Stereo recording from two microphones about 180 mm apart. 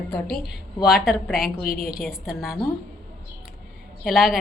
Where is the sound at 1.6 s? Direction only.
55° left (ahead or behind).